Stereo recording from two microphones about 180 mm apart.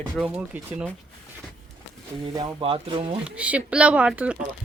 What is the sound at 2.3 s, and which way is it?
Speech, 25° right (ahead or behind).